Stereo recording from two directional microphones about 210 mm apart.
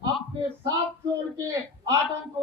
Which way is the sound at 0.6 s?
15° right (ahead or behind).